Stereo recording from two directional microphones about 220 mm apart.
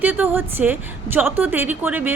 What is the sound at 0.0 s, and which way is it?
A woman's voice, 10° right (ahead or behind).